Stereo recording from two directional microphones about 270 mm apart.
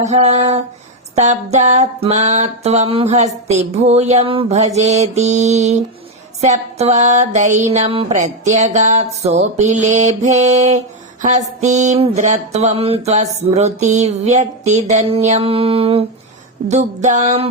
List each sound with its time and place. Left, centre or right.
0.0 s music: right